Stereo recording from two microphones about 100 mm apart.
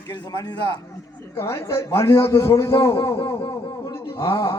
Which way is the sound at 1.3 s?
25° left (ahead or behind).